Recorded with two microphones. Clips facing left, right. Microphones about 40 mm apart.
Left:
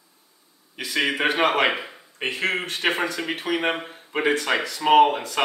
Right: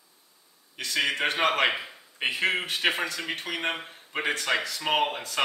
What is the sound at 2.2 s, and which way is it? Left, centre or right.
Speech, centre.